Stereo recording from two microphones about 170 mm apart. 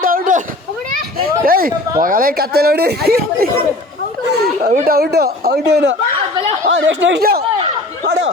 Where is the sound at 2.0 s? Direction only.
55° right (ahead or behind).